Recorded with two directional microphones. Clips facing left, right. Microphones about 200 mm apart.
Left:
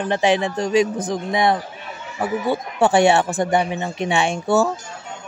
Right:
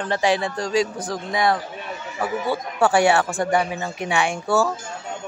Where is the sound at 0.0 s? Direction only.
20° left (ahead or behind).